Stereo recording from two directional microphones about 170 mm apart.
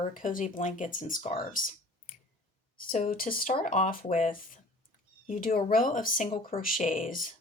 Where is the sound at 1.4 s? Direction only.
55° left (ahead or behind).